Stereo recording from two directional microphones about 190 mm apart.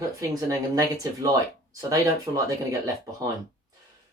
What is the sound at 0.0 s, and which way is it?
Speech, 20° right (ahead or behind).